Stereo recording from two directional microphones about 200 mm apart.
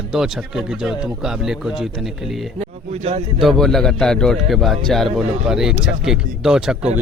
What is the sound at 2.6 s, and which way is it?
Speech, 30° right (ahead or behind).